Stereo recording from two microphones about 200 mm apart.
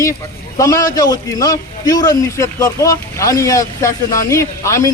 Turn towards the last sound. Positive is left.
turn(degrees=15)  # may be behind; listen again after turning